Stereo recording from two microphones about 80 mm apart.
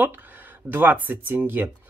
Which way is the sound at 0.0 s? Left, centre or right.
Right.